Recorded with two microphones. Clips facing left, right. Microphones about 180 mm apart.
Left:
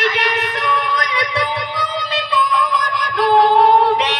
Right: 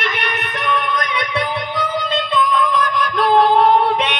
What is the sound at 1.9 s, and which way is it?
Music, 55° right (ahead or behind).